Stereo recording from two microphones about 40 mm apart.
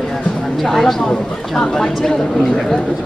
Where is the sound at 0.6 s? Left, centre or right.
Centre.